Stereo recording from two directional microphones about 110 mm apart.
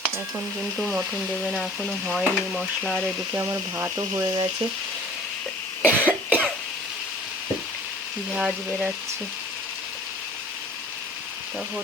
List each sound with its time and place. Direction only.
0.0 s speech: 5° right (ahead or behind)
2.1 s speech: centre (ahead or behind)
3.3 s speech: 20° right (ahead or behind)
5.8 s cough: 15° right (ahead or behind)
8.4 s speech: 10° right (ahead or behind)